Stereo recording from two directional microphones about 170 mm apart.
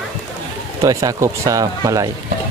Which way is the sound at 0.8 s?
20° right (ahead or behind).